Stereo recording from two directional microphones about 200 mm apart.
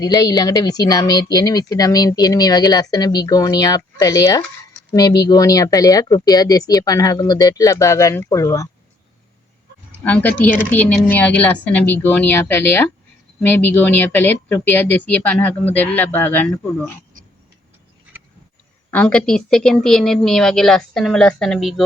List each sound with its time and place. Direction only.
0.0 s speech: 20° left (ahead or behind)
10.0 s speech: 5° left (ahead or behind)
18.9 s a woman's voice: 5° left (ahead or behind)